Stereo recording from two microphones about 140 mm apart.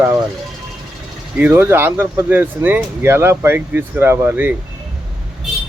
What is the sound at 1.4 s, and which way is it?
Speech, 10° right (ahead or behind).